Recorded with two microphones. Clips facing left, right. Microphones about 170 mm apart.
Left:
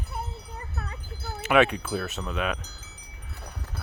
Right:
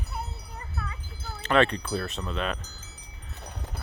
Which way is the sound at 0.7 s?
45° left (ahead or behind).